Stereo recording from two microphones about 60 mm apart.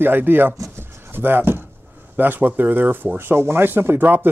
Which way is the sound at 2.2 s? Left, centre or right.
Right.